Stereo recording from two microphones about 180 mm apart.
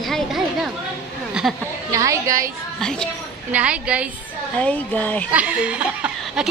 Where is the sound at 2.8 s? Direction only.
5° left (ahead or behind).